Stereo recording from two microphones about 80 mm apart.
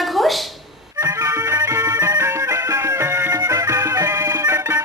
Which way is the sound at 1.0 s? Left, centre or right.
Right.